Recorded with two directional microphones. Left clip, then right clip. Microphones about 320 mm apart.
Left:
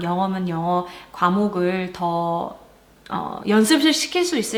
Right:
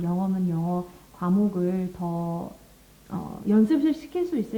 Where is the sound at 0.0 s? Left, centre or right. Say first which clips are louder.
Left 7 dB; centre.